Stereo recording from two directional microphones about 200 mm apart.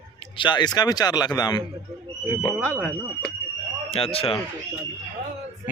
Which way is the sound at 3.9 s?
30° left (ahead or behind).